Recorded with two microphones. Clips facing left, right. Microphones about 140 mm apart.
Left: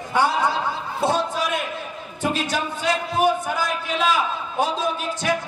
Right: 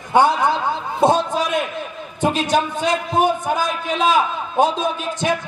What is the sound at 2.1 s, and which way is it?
A man's voice, 20° right (ahead or behind).